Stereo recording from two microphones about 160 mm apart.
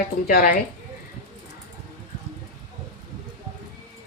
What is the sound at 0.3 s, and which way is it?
Speech, 70° left (ahead or behind).